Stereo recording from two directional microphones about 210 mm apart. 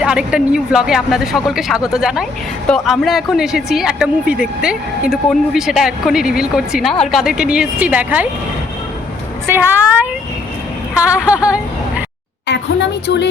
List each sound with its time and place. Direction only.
0.0 s speech: 5° right (ahead or behind)
9.5 s a woman's voice: 10° right (ahead or behind)
11.1 s a sound: 5° right (ahead or behind)
12.5 s a woman's voice: 55° left (ahead or behind)